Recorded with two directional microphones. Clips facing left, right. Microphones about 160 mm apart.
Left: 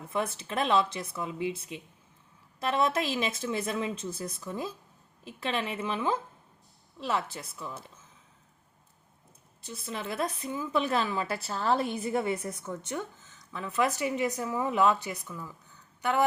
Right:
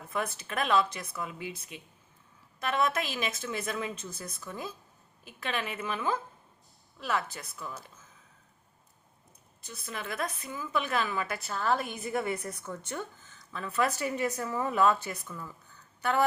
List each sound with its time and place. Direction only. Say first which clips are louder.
0.1 s speech: left 2 dB; 25° left (ahead or behind)
9.6 s speech: left 3 dB; 25° left (ahead or behind)